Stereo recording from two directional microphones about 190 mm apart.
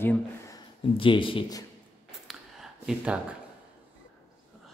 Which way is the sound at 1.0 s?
25° left (ahead or behind).